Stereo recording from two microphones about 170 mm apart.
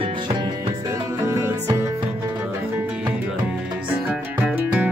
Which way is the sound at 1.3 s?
15° right (ahead or behind).